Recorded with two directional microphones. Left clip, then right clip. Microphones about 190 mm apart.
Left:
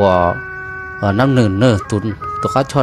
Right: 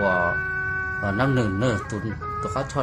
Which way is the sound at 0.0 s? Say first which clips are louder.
Left 8 dB; 40° left (ahead or behind).